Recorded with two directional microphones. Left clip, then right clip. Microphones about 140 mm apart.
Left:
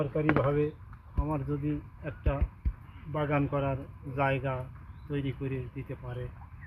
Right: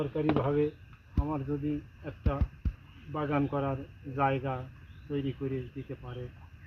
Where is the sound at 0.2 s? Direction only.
15° right (ahead or behind).